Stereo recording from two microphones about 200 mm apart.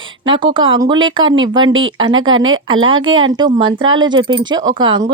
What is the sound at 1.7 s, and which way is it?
Speech, 80° right.